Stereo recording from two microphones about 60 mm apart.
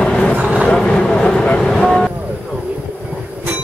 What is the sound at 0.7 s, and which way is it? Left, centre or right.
Vehicle, centre.